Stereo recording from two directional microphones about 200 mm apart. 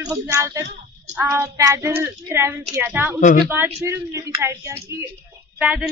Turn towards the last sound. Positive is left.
turn(degrees=-10)  # may be behind; listen again after turning